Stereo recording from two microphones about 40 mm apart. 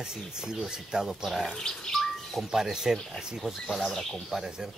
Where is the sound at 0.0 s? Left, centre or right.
Centre.